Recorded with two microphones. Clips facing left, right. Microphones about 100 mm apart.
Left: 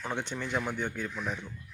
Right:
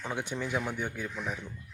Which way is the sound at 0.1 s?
10° right (ahead or behind).